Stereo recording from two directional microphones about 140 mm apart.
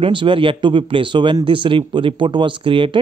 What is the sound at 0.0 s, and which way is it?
Speech, 35° right (ahead or behind).